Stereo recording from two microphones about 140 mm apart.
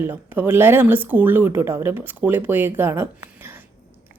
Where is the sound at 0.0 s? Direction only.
15° right (ahead or behind).